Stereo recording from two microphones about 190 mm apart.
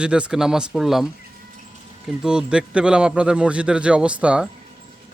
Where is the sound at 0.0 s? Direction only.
5° right (ahead or behind).